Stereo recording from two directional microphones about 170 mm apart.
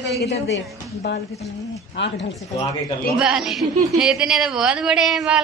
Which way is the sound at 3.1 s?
5° right (ahead or behind).